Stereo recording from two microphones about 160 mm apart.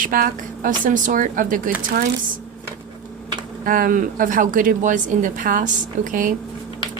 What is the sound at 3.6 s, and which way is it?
A woman's voice, 60° right (ahead or behind).